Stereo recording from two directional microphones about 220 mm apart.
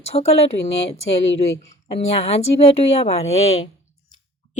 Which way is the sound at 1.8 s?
30° left (ahead or behind).